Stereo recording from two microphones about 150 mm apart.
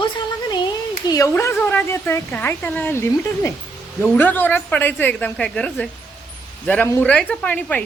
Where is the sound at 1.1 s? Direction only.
20° left (ahead or behind).